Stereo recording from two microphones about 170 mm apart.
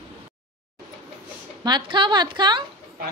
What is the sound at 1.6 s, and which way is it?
A woman's voice, 25° right (ahead or behind).